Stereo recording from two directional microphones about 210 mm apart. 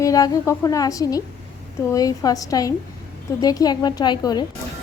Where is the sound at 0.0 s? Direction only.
15° left (ahead or behind).